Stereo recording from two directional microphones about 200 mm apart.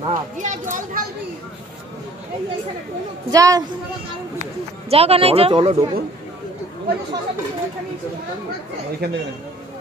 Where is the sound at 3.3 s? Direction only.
15° right (ahead or behind).